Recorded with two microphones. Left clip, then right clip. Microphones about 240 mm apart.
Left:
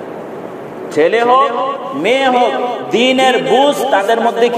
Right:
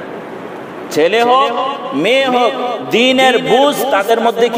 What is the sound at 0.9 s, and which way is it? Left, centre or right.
A man's voice, right.